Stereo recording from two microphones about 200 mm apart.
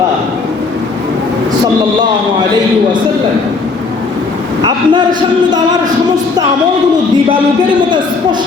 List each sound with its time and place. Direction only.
4.6 s speech: 20° right (ahead or behind)